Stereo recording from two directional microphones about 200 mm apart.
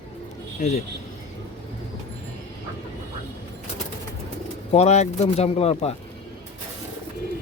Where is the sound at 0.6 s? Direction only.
35° left (ahead or behind).